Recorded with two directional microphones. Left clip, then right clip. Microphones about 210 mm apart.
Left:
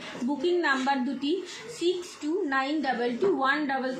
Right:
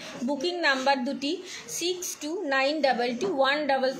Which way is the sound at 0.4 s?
55° right (ahead or behind).